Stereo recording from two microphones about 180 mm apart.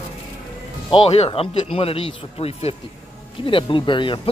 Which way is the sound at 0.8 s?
30° left (ahead or behind).